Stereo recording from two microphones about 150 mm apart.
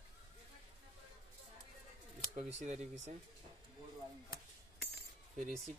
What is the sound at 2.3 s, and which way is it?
Speech, 50° right (ahead or behind).